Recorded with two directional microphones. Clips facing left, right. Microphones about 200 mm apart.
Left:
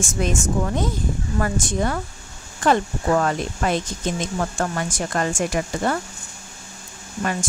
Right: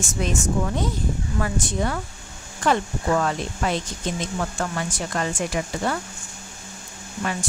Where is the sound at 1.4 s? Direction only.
45° left (ahead or behind).